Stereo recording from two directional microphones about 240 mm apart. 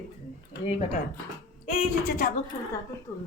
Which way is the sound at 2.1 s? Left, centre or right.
Left.